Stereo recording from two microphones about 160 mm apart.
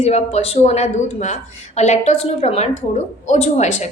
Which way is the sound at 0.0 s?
40° left (ahead or behind).